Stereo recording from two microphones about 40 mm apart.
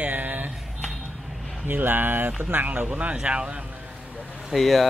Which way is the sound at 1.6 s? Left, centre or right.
Right.